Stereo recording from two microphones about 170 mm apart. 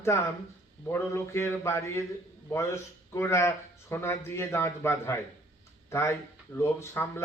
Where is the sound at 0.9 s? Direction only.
15° left (ahead or behind).